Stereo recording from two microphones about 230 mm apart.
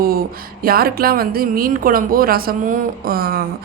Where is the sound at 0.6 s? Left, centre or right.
Right.